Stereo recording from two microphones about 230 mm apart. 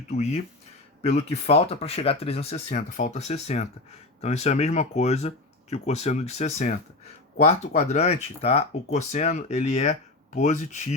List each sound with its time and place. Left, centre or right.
0.1 s speech: left